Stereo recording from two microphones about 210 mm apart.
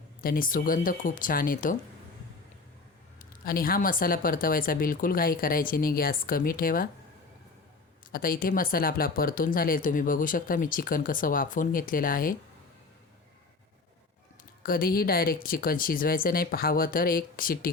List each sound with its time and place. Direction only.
0.2 s speech: 40° left (ahead or behind)
3.2 s speech: 45° left (ahead or behind)
8.1 s speech: 45° left (ahead or behind)
14.6 s speech: 45° left (ahead or behind)